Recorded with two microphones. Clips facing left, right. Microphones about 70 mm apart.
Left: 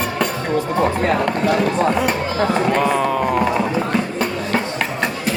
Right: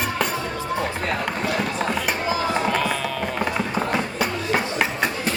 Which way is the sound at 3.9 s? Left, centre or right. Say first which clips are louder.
Left 3 dB; centre.